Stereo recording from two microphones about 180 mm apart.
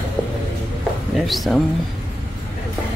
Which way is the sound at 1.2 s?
Centre (ahead or behind).